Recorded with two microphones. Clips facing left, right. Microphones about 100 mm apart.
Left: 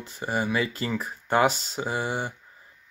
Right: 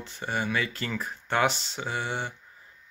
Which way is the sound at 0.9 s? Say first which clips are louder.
Left 3 dB; 10° left (ahead or behind).